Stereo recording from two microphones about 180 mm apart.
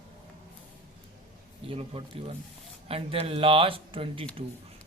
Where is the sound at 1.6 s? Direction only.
30° right (ahead or behind).